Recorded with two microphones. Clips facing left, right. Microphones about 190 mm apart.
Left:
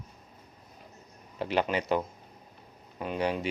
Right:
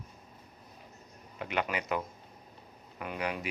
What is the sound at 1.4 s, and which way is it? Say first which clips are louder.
Speech: left 5 dB; 30° left (ahead or behind).